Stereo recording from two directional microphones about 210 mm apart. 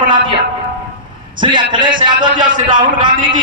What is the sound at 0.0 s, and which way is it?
Speech, 25° right (ahead or behind).